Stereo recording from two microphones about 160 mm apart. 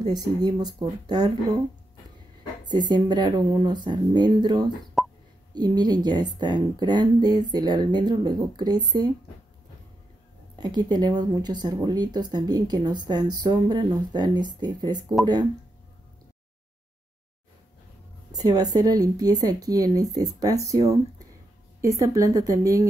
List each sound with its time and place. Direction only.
0.0 s speech: 25° right (ahead or behind)
2.6 s speech: 25° right (ahead or behind)
5.0 s plop: centre (ahead or behind)
5.5 s speech: 25° right (ahead or behind)
10.6 s speech: 25° right (ahead or behind)
18.3 s speech: 25° right (ahead or behind)